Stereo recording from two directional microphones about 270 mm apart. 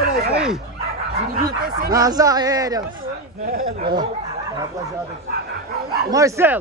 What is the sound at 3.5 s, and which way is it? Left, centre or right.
Speech, right.